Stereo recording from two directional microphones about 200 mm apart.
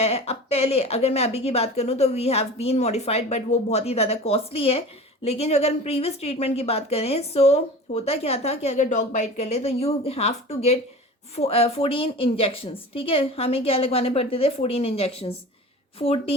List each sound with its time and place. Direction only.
0.0 s a woman's voice: 30° left (ahead or behind)